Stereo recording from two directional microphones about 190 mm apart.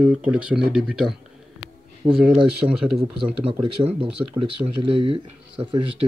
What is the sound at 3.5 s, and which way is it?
Speech, 25° right (ahead or behind).